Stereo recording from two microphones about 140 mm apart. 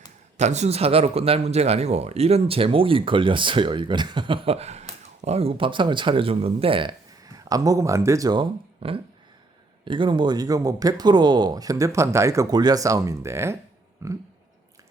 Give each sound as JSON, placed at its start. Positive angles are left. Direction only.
{"t": 0.3, "sound": "speech", "side_deg": -55}
{"t": 7.3, "sound": "speech", "side_deg": -25}